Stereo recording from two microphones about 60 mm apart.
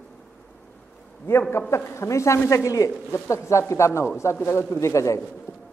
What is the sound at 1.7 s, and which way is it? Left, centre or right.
Speech, left.